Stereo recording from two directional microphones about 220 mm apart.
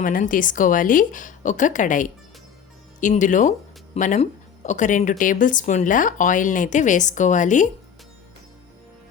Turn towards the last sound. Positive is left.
turn(degrees=35)  # may be behind; listen again after turning